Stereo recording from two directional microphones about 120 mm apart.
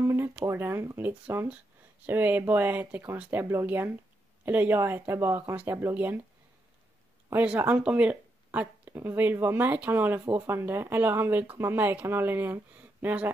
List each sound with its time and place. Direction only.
0.0 s speech: 20° right (ahead or behind)
7.2 s speech: 15° right (ahead or behind)